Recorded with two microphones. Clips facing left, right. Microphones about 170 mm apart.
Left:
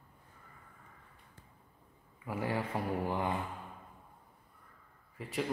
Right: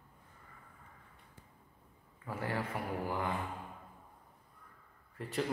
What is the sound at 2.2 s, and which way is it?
Speech, 20° left (ahead or behind).